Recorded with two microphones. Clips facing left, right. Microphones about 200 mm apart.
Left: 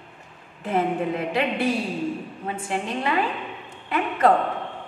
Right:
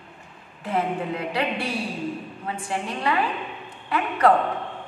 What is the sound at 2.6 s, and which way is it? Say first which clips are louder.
A woman's voice: even; 20° left (ahead or behind).